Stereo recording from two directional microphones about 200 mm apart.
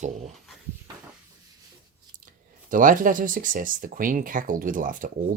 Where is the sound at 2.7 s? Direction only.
40° right (ahead or behind).